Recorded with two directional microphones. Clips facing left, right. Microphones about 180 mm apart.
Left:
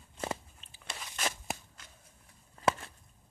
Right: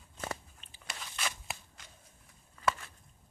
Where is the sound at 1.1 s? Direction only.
45° left (ahead or behind).